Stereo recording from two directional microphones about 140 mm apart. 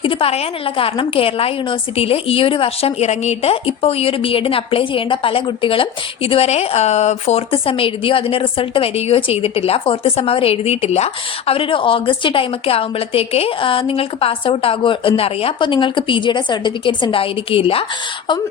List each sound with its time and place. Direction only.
0.0 s a woman's voice: 40° left (ahead or behind)
7.5 s a woman's voice: 40° left (ahead or behind)